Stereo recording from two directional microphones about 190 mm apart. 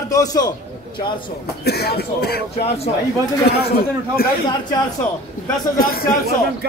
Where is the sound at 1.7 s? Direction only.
55° left (ahead or behind).